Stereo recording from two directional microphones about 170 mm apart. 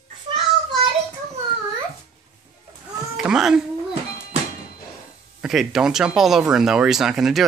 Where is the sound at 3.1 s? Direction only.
5° right (ahead or behind).